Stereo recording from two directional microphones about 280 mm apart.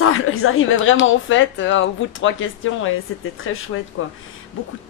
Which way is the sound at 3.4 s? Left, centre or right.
Left.